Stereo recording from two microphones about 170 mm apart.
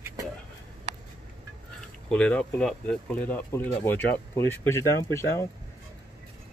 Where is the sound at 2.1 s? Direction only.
5° left (ahead or behind).